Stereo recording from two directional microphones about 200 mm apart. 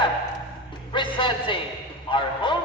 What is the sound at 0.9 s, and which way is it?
A man's voice, 25° left (ahead or behind).